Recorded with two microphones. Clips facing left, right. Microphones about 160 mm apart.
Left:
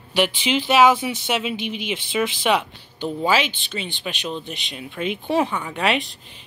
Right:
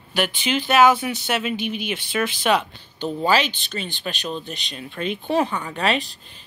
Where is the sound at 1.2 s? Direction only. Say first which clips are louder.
Right 1 dB; 15° left (ahead or behind).